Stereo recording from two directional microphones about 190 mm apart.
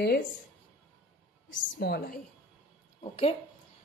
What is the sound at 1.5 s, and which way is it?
Speech, 55° left (ahead or behind).